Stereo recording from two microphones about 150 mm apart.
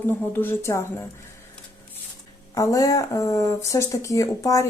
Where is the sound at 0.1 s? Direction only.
15° left (ahead or behind).